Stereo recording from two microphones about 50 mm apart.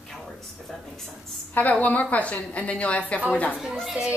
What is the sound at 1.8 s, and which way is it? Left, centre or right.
A woman's voice, left.